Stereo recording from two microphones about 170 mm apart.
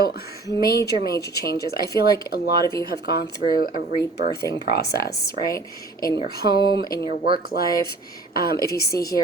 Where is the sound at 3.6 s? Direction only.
60° left (ahead or behind).